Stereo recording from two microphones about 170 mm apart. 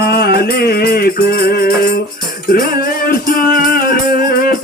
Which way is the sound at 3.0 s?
60° left (ahead or behind).